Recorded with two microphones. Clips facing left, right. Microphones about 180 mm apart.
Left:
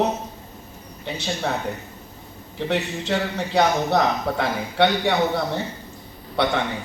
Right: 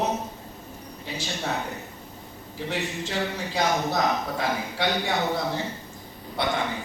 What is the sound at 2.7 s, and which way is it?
A man's voice, 65° left (ahead or behind).